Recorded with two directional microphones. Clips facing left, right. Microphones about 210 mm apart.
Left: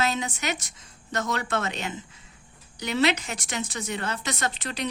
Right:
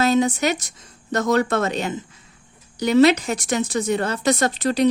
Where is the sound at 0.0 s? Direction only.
40° right (ahead or behind).